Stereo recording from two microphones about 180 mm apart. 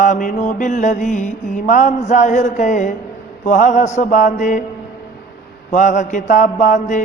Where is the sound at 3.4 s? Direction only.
40° left (ahead or behind).